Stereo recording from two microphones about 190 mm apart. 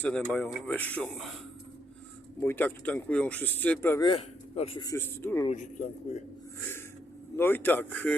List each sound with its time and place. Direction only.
0.0 s speech: 5° left (ahead or behind)
2.4 s speech: 10° left (ahead or behind)
4.0 s speech: 30° left (ahead or behind); by 5.5 s 15° left (ahead or behind)
7.3 s speech: 10° left (ahead or behind)